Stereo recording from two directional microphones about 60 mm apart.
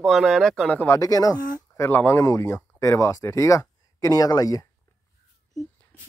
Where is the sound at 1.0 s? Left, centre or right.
Left.